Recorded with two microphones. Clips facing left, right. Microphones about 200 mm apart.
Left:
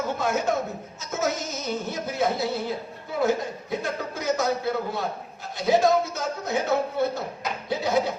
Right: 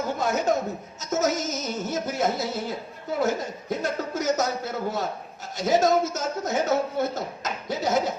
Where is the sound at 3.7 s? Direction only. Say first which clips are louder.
Right 3 dB; 45° right (ahead or behind).